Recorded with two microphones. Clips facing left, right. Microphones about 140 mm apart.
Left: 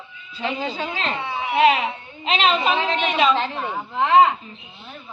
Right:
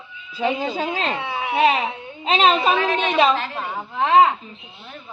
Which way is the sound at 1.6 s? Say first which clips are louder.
Left 1 dB; 30° right (ahead or behind).